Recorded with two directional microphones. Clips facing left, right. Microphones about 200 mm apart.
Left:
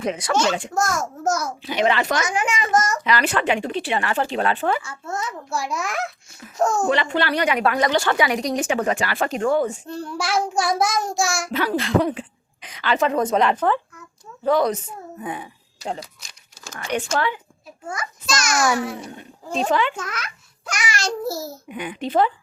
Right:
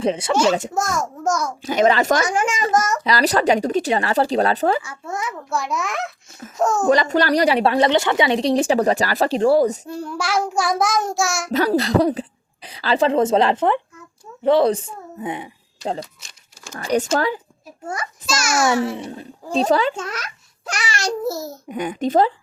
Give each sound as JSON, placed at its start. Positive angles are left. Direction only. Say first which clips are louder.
{"t": 0.0, "sound": "a woman's voice", "louder": "right 4 dB", "side_deg": -30}
{"t": 0.4, "sound": "a woman's voice", "louder": "right 5 dB", "side_deg": -40}
{"t": 0.7, "sound": "child singing", "louder": "even", "side_deg": 0}
{"t": 1.6, "sound": "a child's voice", "louder": "right 5 dB", "side_deg": -45}
{"t": 4.8, "sound": "a child's voice", "louder": "right 1 dB", "side_deg": -15}
{"t": 5.5, "sound": "child singing", "louder": "right 3 dB", "side_deg": 0}
{"t": 6.8, "sound": "a woman's voice", "louder": "right 4 dB", "side_deg": -40}
{"t": 9.8, "sound": "child singing", "louder": "right 1 dB", "side_deg": -5}
{"t": 11.5, "sound": "a woman's voice", "louder": "right 4 dB", "side_deg": -40}
{"t": 16.7, "sound": "a woman's voice", "louder": "right 5 dB", "side_deg": -35}
{"t": 18.3, "sound": "a child's voice", "louder": "right 2 dB", "side_deg": -5}
{"t": 18.9, "sound": "a child's voice", "louder": "right 4 dB", "side_deg": -30}
{"t": 21.0, "sound": "a child's voice", "louder": "right 4 dB", "side_deg": -15}
{"t": 21.7, "sound": "a child's voice", "louder": "right 6 dB", "side_deg": -45}